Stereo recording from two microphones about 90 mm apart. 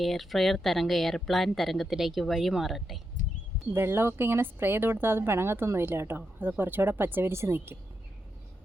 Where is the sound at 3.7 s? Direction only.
25° right (ahead or behind).